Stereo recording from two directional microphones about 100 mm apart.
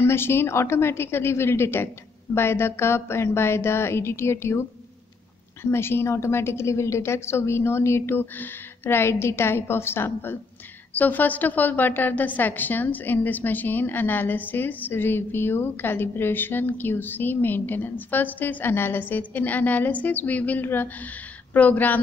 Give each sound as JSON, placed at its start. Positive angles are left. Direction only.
{"t": 0.0, "sound": "a woman's voice", "side_deg": 25}